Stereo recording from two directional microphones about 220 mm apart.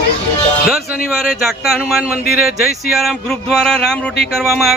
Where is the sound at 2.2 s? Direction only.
45° left (ahead or behind).